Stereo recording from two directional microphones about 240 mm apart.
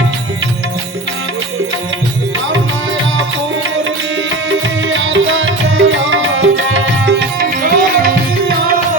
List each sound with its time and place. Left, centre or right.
4.4 s music: right